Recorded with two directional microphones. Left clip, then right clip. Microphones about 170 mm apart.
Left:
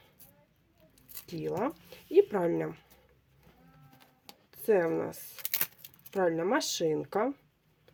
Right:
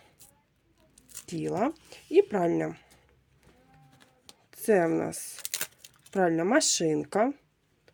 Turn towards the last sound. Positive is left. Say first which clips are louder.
# right 3 dB
turn(degrees=-25)  # may be behind; listen again after turning